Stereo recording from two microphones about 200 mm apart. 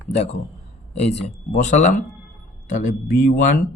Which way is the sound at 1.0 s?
35° left (ahead or behind).